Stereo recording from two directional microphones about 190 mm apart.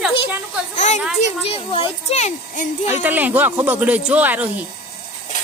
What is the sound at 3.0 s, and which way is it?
Speech, 10° right (ahead or behind).